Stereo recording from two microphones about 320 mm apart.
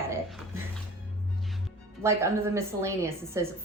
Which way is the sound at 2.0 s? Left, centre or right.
Centre.